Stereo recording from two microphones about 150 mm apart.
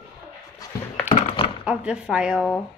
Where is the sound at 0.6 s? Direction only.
25° left (ahead or behind).